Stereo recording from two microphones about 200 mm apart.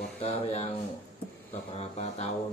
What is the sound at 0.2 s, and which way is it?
Speech, 30° left (ahead or behind).